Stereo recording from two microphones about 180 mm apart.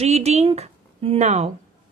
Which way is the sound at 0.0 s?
35° right (ahead or behind).